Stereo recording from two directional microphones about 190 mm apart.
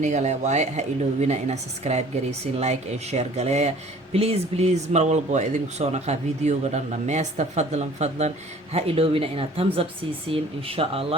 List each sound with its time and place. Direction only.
0.0 s a woman's voice: 35° right (ahead or behind)